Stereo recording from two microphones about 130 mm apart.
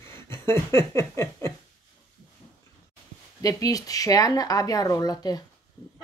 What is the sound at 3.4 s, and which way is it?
Speech, 25° left (ahead or behind).